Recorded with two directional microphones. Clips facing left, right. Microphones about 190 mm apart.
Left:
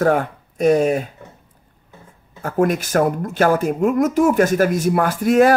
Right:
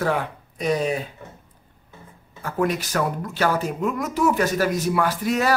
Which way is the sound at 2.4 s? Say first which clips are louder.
Left 5 dB; 50° left (ahead or behind).